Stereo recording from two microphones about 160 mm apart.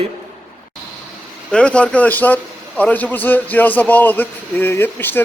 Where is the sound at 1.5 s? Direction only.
5° left (ahead or behind).